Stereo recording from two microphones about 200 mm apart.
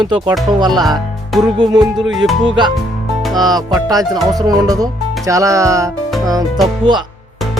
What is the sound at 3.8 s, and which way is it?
Speech, 20° right (ahead or behind).